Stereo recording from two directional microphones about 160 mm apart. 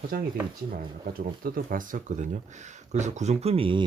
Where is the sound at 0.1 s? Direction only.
70° right (ahead or behind).